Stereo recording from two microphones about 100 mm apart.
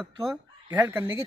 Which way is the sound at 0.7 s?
25° right (ahead or behind).